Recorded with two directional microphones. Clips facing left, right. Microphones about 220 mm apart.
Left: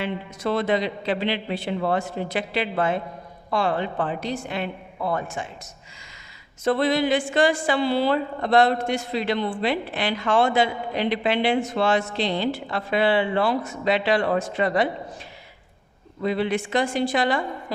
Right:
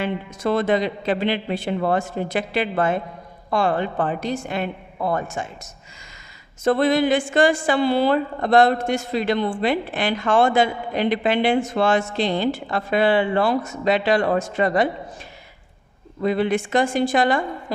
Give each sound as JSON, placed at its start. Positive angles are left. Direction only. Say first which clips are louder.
{"t": 0.0, "sound": "a woman's voice", "louder": "right 3 dB", "side_deg": -50}
{"t": 6.7, "sound": "a woman's voice", "louder": "right 3 dB", "side_deg": -50}
{"t": 16.2, "sound": "a woman's voice", "louder": "right 3 dB", "side_deg": -50}